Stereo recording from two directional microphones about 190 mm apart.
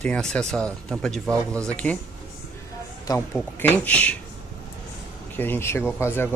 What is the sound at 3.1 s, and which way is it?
Speech, 20° left (ahead or behind).